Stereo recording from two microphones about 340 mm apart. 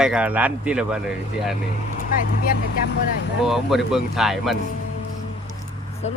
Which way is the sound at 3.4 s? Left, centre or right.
Centre.